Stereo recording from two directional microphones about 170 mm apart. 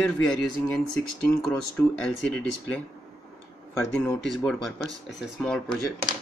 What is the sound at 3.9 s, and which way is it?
Speech, 5° left (ahead or behind).